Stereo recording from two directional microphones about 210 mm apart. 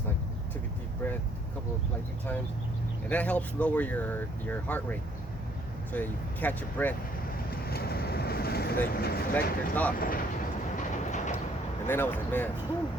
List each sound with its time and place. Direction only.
1.0 s speech: 10° left (ahead or behind)
3.1 s speech: 5° left (ahead or behind)
7.5 s vehicle: 45° left (ahead or behind)
8.9 s speech: 45° left (ahead or behind)
9.3 s speech: 5° left (ahead or behind)
10.0 s speech: 45° left (ahead or behind)
10.8 s train: 35° left (ahead or behind)
11.9 s speech: 10° left (ahead or behind)